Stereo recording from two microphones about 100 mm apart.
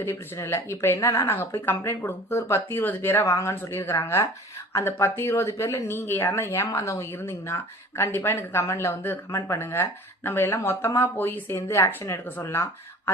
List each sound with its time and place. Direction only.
0.0 s speech: 25° left (ahead or behind)